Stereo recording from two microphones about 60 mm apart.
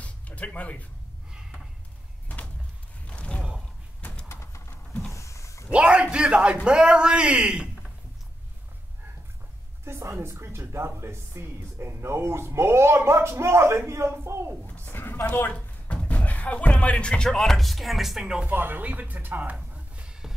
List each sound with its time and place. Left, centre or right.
0.0 s music: left
1.3 s a sound: centre
2.2 s a sound: left
3.1 s mechanisms: centre
4.3 s bird: left
5.1 s a sound: left
5.7 s a man's voice: centre
9.8 s a woman's voice: right
14.9 s speech: left
15.5 s speech: centre
18.5 s speech: right
19.7 s music: centre